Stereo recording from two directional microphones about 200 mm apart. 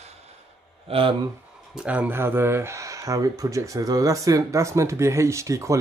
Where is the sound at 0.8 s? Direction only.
30° right (ahead or behind).